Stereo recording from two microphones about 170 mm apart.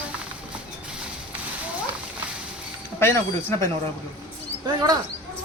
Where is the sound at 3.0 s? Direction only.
15° left (ahead or behind).